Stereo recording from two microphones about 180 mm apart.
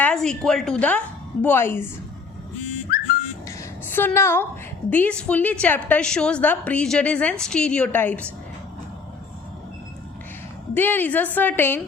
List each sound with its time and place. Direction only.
0.0 s a woman's voice: 5° left (ahead or behind)
2.9 s dog: 60° left (ahead or behind)
3.9 s a woman's voice: 10° left (ahead or behind)
10.8 s a woman's voice: 10° left (ahead or behind)